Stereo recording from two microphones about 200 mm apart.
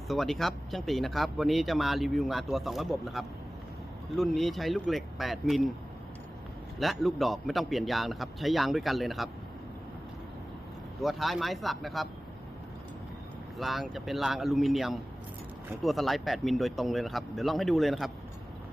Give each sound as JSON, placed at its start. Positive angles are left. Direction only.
{"t": 0.1, "sound": "speech", "side_deg": 0}
{"t": 6.7, "sound": "speech", "side_deg": 0}
{"t": 11.0, "sound": "speech", "side_deg": 0}
{"t": 13.6, "sound": "speech", "side_deg": 0}